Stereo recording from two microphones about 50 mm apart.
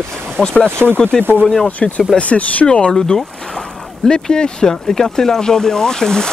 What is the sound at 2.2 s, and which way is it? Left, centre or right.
Speech, left.